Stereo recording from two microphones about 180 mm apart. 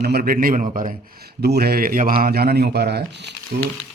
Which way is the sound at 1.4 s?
60° right (ahead or behind).